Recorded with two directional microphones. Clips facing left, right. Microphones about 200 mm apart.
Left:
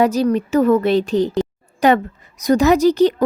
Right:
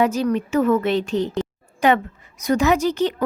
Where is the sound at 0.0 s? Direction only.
35° left (ahead or behind).